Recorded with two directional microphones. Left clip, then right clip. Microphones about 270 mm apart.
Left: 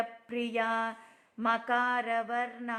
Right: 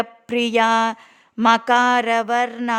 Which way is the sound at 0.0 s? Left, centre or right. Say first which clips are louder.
Right 13 dB; right.